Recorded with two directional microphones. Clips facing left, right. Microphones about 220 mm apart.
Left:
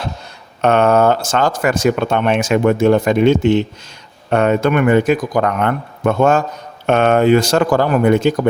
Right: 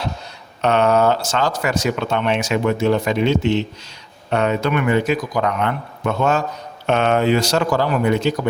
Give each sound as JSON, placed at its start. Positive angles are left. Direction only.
{"t": 0.6, "sound": "speech", "side_deg": 50}